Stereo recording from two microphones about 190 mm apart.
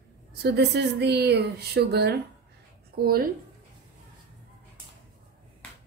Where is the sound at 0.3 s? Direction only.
60° right (ahead or behind).